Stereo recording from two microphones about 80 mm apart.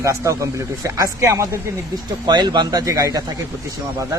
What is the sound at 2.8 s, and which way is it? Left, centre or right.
Speech, right.